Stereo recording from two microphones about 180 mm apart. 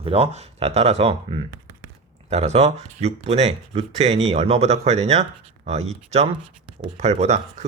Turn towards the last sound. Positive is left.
turn(degrees=-40)  # may be behind; listen again after turning